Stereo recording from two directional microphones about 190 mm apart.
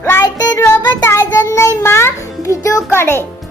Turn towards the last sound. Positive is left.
turn(degrees=10)  # may be behind; listen again after turning